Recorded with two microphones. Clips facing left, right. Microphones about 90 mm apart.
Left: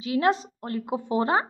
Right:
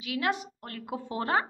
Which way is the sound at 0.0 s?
30° left (ahead or behind).